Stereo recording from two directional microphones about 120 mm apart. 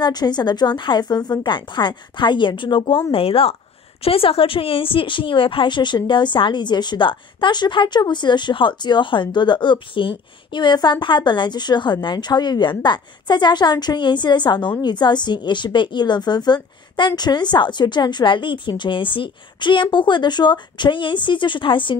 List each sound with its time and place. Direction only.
0.0 s a woman's voice: 35° left (ahead or behind)